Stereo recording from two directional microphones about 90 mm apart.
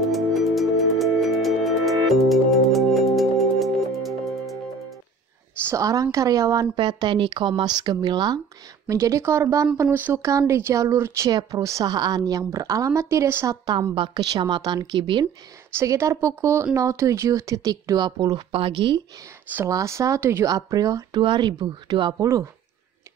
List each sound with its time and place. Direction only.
0.1 s music: centre (ahead or behind)
5.7 s speech: 40° right (ahead or behind)
6.7 s speech: 55° right (ahead or behind)
8.8 s speech: 35° right (ahead or behind)
11.9 s a woman's voice: 50° right (ahead or behind); by 13.6 s 30° right (ahead or behind)
13.7 s a woman's voice: 70° right (ahead or behind)
14.3 s speech: 55° right (ahead or behind)
15.7 s speech: 35° right (ahead or behind); by 18.4 s 50° right (ahead or behind)
18.5 s speech: 80° right
19.7 s speech: 35° right (ahead or behind)
20.4 s speech: 45° right (ahead or behind)
21.1 s speech: 60° right (ahead or behind)